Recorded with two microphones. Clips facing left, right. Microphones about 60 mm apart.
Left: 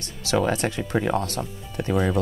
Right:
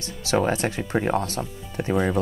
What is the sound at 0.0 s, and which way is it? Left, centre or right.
Speech, right.